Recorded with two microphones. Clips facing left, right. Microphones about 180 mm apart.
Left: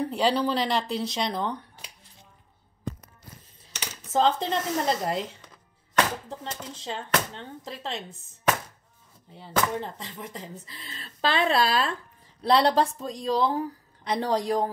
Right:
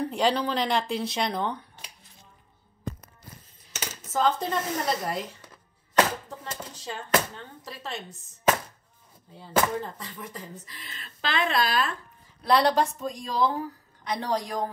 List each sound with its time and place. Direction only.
0.0 s speech: 5° left (ahead or behind)
4.1 s speech: 25° left (ahead or behind)
6.4 s speech: 25° left (ahead or behind)
9.4 s a woman's voice: 20° left (ahead or behind)